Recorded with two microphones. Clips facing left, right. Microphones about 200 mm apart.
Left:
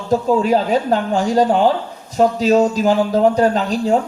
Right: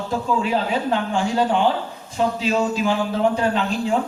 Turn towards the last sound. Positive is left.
turn(degrees=40)  # may be behind; listen again after turning